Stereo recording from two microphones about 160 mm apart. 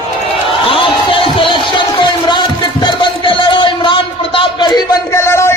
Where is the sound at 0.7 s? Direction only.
30° left (ahead or behind).